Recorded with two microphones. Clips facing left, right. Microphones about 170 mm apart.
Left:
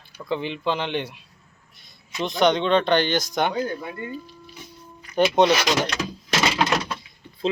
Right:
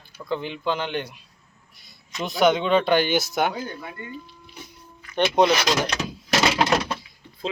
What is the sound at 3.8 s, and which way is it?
Speech, 35° left (ahead or behind).